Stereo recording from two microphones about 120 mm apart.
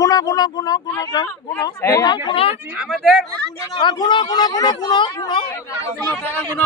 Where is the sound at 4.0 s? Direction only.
40° left (ahead or behind).